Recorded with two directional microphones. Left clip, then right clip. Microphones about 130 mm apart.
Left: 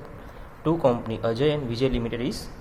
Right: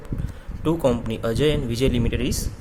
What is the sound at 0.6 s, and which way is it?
A man's voice, 60° right (ahead or behind).